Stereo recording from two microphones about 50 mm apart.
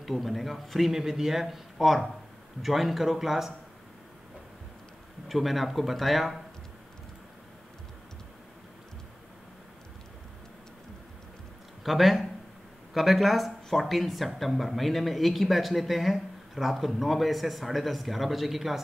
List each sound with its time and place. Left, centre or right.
0.0 s speech: centre
5.3 s speech: centre
11.8 s speech: centre